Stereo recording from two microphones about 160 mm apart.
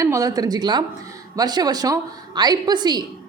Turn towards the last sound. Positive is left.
turn(degrees=-25)  # may be behind; listen again after turning